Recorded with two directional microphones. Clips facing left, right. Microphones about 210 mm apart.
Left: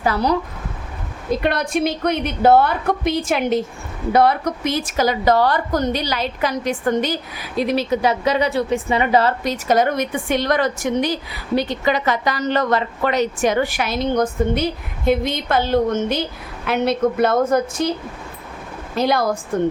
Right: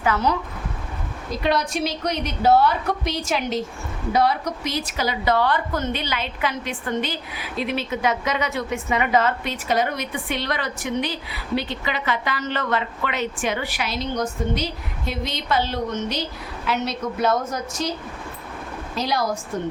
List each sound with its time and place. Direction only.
0.0 s a woman's voice: 35° left (ahead or behind)
1.4 s a woman's voice: 55° left (ahead or behind)
18.9 s a woman's voice: 55° left (ahead or behind)